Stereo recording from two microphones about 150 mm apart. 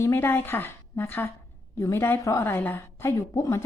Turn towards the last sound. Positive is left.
turn(degrees=20)  # may be behind; listen again after turning